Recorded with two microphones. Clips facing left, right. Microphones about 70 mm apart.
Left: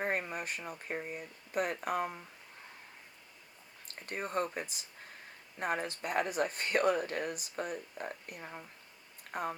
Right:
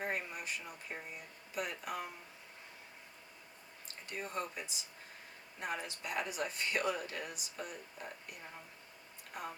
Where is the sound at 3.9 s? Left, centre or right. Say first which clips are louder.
Left 5 dB; left.